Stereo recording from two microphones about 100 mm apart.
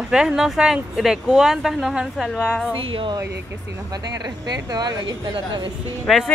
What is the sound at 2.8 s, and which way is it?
Speech, 60° right (ahead or behind).